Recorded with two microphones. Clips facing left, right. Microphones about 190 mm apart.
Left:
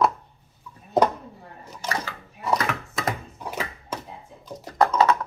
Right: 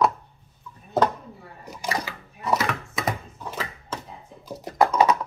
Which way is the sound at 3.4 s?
10° left (ahead or behind).